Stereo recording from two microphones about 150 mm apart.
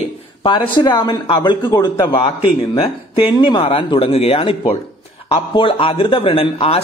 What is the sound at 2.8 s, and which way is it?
Speech, 35° left (ahead or behind).